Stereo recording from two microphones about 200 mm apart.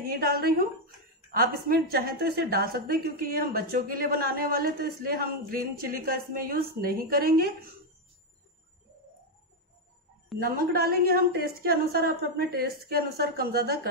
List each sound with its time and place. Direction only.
0.0 s a woman's voice: 50° right (ahead or behind)
10.4 s a woman's voice: 50° right (ahead or behind)